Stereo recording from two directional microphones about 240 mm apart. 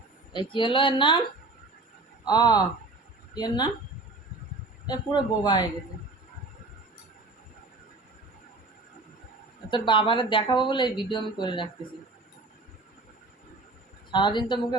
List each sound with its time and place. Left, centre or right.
0.5 s speech: left
2.2 s a man's voice: centre
4.9 s a man's voice: centre
9.6 s speech: centre
14.1 s speech: centre